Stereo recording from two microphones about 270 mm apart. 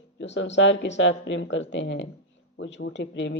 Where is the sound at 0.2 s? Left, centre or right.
Left.